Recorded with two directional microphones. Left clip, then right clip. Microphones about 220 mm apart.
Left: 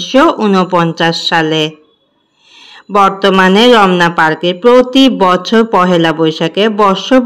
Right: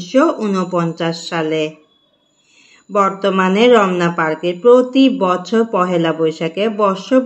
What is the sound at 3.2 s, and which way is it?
Speech, 45° left (ahead or behind).